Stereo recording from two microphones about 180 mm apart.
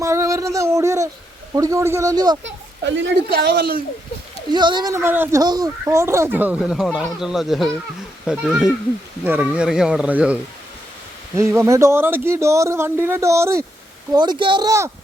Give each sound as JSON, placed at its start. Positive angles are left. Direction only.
{"t": 0.0, "sound": "a sound", "side_deg": -15}
{"t": 1.5, "sound": "a man's voice", "side_deg": -20}
{"t": 2.4, "sound": "speech", "side_deg": -90}
{"t": 3.3, "sound": "a man's voice", "side_deg": -60}
{"t": 4.5, "sound": "speech", "side_deg": -25}
{"t": 11.3, "sound": "a man's voice", "side_deg": -15}